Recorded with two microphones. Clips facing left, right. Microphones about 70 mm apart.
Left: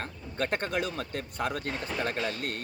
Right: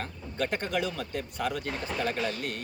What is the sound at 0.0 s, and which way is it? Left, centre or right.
Speech, left.